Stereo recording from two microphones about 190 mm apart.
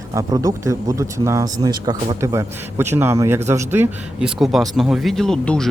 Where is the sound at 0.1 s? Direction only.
20° right (ahead or behind).